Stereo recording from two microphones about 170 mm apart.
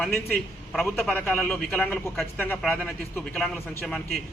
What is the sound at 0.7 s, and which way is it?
A man's voice, 5° left (ahead or behind).